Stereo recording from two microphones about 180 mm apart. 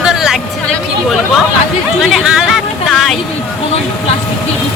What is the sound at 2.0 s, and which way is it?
A woman's voice, centre (ahead or behind).